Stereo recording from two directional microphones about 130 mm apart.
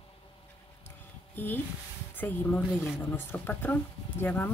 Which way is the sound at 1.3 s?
15° left (ahead or behind).